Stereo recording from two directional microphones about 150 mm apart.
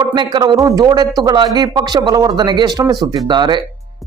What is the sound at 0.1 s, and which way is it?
A man's voice, 30° right (ahead or behind).